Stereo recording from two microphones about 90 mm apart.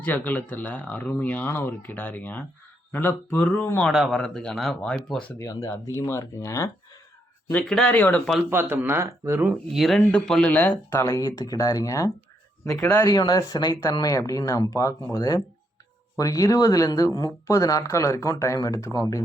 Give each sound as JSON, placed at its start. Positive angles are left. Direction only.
{"t": 0.0, "sound": "speech", "side_deg": 20}
{"t": 4.8, "sound": "speech", "side_deg": 15}
{"t": 5.4, "sound": "speech", "side_deg": 35}
{"t": 7.5, "sound": "speech", "side_deg": 10}
{"t": 8.4, "sound": "speech", "side_deg": -25}
{"t": 9.5, "sound": "speech", "side_deg": 0}
{"t": 10.9, "sound": "speech", "side_deg": 30}
{"t": 11.2, "sound": "speech", "side_deg": 45}
{"t": 13.1, "sound": "speech", "side_deg": 45}